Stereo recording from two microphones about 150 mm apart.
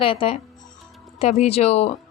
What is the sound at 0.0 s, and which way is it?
Speech, 35° left (ahead or behind).